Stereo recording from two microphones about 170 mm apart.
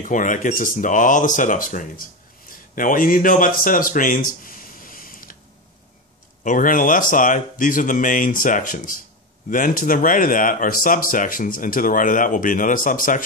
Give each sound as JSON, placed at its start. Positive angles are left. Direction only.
{"t": 0.0, "sound": "speech", "side_deg": 50}
{"t": 6.4, "sound": "speech", "side_deg": 50}